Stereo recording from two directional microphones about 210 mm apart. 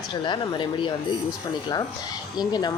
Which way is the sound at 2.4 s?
20° left (ahead or behind).